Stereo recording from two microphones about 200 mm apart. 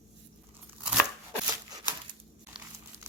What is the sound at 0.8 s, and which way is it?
Scissors, 5° right (ahead or behind).